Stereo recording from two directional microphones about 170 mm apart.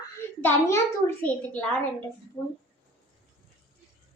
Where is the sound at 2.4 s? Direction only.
25° left (ahead or behind).